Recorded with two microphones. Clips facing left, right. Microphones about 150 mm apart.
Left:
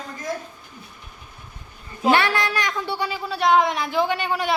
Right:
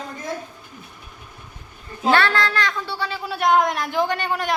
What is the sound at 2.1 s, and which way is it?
A woman's voice, 20° left (ahead or behind).